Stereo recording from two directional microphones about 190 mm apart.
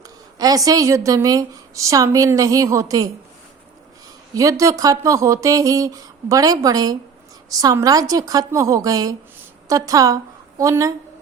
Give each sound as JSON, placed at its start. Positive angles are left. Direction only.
{"t": 0.3, "sound": "a woman's voice", "side_deg": -20}
{"t": 4.4, "sound": "a woman's voice", "side_deg": -15}